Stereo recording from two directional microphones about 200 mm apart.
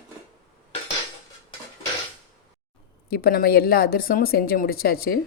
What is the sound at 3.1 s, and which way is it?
A woman's voice, 50° left (ahead or behind).